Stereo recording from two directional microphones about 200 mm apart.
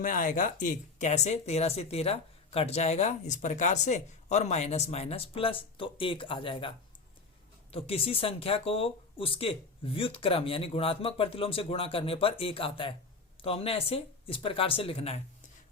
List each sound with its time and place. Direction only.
0.0 s speech: 40° left (ahead or behind)